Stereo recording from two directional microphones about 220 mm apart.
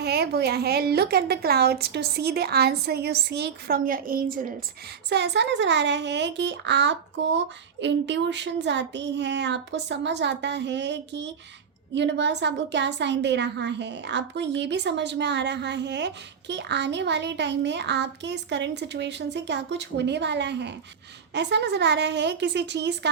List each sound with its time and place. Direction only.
0.0 s a woman's voice: 45° right (ahead or behind)
5.0 s a woman's voice: 50° right (ahead or behind)